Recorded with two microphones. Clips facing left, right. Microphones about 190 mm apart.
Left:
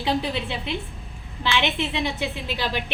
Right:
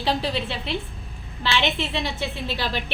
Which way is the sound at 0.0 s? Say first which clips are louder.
Even; 20° left (ahead or behind).